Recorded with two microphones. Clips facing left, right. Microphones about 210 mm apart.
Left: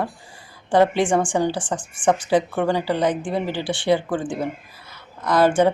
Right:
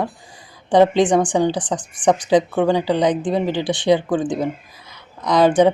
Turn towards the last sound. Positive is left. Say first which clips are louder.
# right 3 dB
turn(degrees=-15)  # may be behind; listen again after turning